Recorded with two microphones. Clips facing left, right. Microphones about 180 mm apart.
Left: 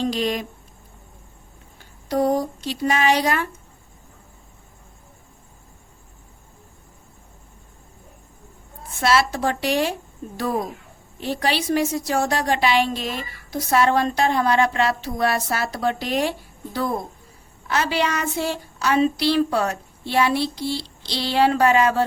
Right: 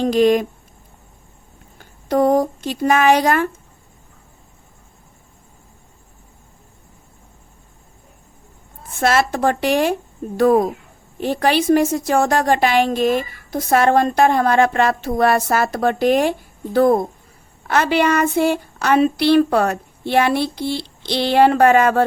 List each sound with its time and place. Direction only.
0.0 s a woman's voice: 50° right (ahead or behind)
2.0 s a woman's voice: 55° right (ahead or behind)
9.0 s a woman's voice: 50° right (ahead or behind)